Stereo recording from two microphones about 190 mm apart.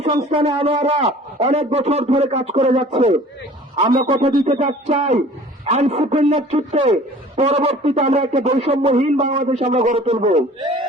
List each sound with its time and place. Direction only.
0.0 s a man's voice: 35° right (ahead or behind)
4.1 s a sound: 25° right (ahead or behind)
4.4 s a man's voice: 35° right (ahead or behind)